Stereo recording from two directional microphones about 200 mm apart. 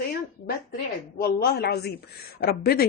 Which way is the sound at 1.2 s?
50° left (ahead or behind).